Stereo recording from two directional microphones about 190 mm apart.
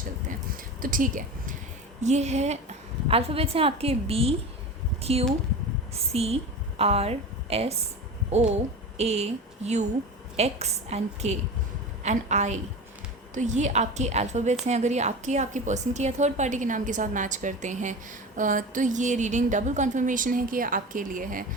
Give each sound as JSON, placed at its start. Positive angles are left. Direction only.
{"t": 0.3, "sound": "a sound", "side_deg": -45}
{"t": 2.0, "sound": "a woman's voice", "side_deg": -35}
{"t": 5.9, "sound": "a woman's voice", "side_deg": -30}